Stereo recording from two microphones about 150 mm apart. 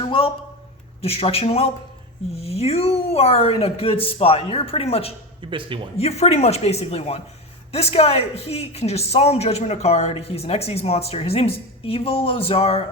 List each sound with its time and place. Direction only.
0.0 s a sound: 35° left (ahead or behind)
1.0 s a woman's voice: 40° left (ahead or behind)
5.4 s speech: 35° right (ahead or behind)
6.0 s a woman's voice: 45° left (ahead or behind)